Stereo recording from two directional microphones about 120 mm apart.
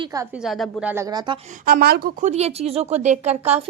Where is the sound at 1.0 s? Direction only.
35° right (ahead or behind).